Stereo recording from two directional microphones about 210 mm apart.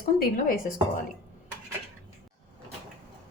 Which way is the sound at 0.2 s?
45° left (ahead or behind).